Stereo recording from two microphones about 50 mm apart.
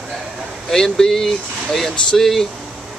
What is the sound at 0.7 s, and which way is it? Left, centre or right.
Speech, centre.